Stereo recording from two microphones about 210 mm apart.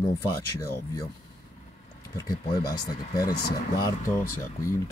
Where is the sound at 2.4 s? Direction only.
45° left (ahead or behind).